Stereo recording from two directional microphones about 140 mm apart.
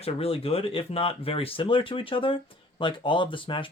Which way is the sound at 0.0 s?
45° left (ahead or behind).